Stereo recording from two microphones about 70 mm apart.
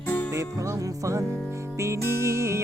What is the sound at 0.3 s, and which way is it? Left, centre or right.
Music, right.